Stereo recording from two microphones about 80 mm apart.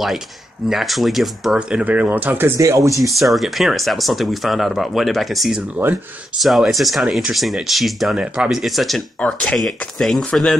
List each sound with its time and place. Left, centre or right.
0.7 s speech: centre
1.6 s speech: centre; by 2.6 s right
2.6 s speech: right
3.0 s speech: centre
5.8 s speech: right
6.3 s speech: centre